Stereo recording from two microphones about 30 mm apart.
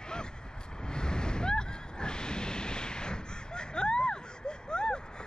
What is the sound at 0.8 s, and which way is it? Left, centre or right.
Waves, left.